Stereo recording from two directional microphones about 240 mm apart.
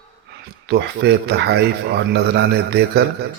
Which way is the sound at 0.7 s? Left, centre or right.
Right.